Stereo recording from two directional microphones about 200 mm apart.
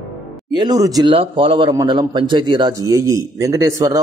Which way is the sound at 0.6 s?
20° right (ahead or behind).